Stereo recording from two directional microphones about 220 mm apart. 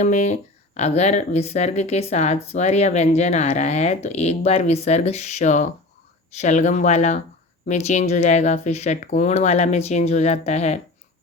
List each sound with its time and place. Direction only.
0.0 s speech: 30° left (ahead or behind)